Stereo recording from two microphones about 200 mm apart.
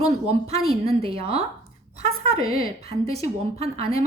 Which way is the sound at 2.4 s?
45° left (ahead or behind).